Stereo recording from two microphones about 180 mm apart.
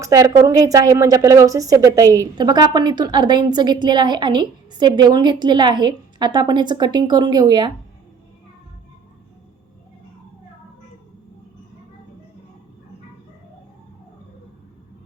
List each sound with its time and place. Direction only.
0.0 s a woman's voice: 20° right (ahead or behind)